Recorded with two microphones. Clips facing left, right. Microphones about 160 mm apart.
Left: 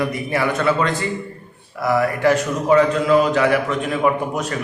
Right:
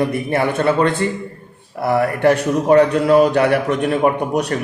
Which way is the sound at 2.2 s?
60° right (ahead or behind).